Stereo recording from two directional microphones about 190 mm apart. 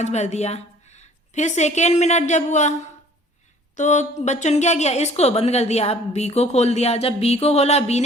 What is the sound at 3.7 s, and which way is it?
A woman's voice, 40° left (ahead or behind).